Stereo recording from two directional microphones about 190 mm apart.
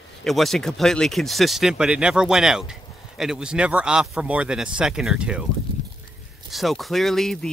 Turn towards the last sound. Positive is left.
turn(degrees=0)  # may be behind; listen again after turning